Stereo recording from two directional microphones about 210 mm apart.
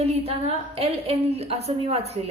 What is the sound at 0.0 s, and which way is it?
A woman's voice, 30° right (ahead or behind).